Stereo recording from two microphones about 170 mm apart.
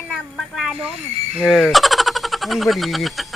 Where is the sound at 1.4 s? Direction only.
Centre (ahead or behind).